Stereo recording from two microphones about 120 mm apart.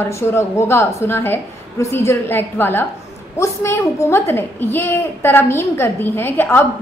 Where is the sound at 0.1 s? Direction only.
20° left (ahead or behind).